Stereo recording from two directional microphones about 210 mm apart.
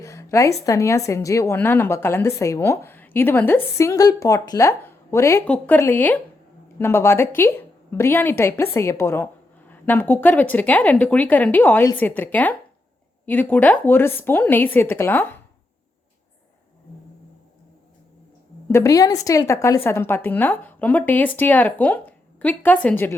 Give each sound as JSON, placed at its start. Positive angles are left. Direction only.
{"t": 0.0, "sound": "a sound", "side_deg": 15}
{"t": 0.6, "sound": "a woman's voice", "side_deg": 15}
{"t": 18.7, "sound": "a woman's voice", "side_deg": 15}